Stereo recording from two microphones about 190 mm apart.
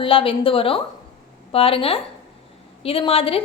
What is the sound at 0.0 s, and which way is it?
A woman's voice, 30° left (ahead or behind).